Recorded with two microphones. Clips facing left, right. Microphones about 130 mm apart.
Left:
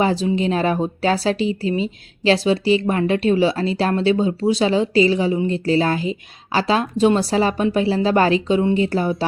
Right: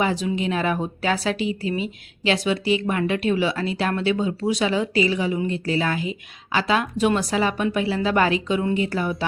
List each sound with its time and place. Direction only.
0.0 s speech: 35° left (ahead or behind)